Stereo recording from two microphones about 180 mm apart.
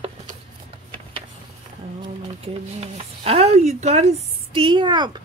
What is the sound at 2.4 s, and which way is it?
Speech, 35° right (ahead or behind).